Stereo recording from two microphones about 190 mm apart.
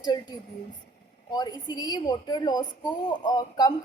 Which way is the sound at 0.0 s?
20° left (ahead or behind).